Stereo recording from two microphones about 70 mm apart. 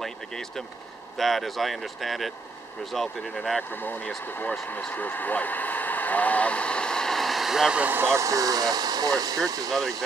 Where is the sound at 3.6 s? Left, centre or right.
Left; by 7.7 s centre.